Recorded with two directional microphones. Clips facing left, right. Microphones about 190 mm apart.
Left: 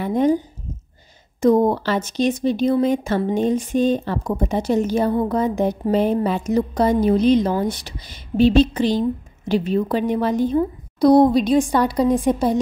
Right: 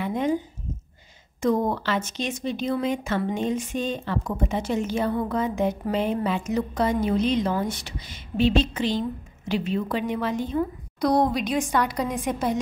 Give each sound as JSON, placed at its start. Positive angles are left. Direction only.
{"t": 0.0, "sound": "speech", "side_deg": 40}
{"t": 1.4, "sound": "speech", "side_deg": 40}